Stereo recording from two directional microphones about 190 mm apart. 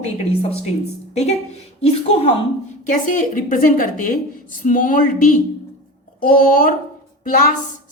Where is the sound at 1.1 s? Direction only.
35° left (ahead or behind).